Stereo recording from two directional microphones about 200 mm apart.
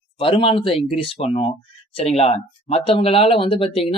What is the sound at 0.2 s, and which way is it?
Speech, 25° left (ahead or behind).